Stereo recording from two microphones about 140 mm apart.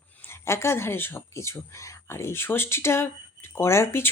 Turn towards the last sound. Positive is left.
turn(degrees=20)  # may be behind; listen again after turning